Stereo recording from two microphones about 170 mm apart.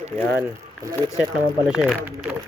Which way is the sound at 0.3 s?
15° right (ahead or behind).